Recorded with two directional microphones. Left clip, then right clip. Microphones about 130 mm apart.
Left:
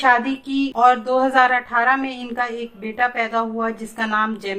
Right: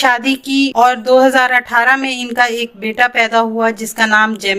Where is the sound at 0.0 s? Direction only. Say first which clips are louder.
Right 3 dB; 35° right (ahead or behind).